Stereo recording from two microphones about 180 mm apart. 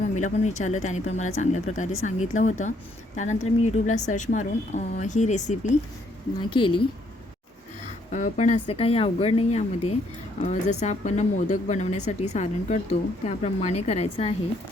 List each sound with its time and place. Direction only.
0.2 s speech: 40° left (ahead or behind)
6.5 s a woman's voice: 30° left (ahead or behind)
8.1 s speech: 45° left (ahead or behind)